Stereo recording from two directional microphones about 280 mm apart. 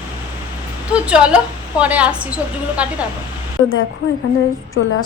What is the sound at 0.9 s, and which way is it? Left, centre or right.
A woman's voice, centre.